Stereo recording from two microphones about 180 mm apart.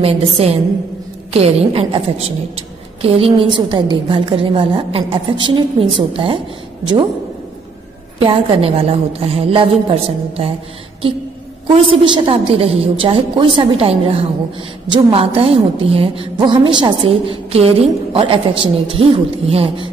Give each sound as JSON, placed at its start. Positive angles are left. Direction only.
{"t": 0.0, "sound": "a woman's voice", "side_deg": -35}
{"t": 8.2, "sound": "a woman's voice", "side_deg": -30}
{"t": 11.6, "sound": "a woman's voice", "side_deg": -30}